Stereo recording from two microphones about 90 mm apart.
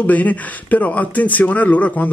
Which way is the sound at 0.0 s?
15° left (ahead or behind).